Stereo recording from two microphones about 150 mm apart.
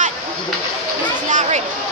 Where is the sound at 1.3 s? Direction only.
50° right (ahead or behind).